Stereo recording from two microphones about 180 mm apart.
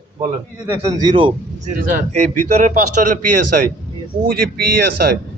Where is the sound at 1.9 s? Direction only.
45° right (ahead or behind).